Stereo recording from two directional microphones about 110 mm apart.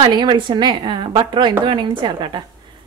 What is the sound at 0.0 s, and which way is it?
A woman's voice, 45° right (ahead or behind).